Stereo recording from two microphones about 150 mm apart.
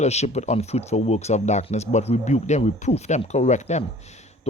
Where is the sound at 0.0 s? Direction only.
45° left (ahead or behind).